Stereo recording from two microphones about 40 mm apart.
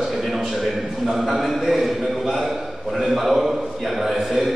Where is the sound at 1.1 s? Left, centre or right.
Centre.